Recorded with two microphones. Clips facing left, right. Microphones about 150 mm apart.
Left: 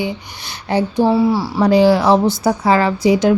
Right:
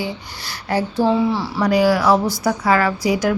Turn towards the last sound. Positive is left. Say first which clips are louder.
# left 5 dB
turn(degrees=25)  # may be behind; listen again after turning